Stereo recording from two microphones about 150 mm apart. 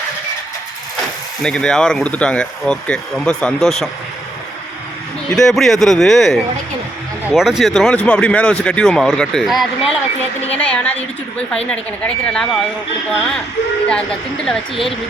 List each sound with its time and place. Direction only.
1.4 s speech: 5° left (ahead or behind)
5.3 s speech: 5° left (ahead or behind)
13.8 s speech: 5° left (ahead or behind)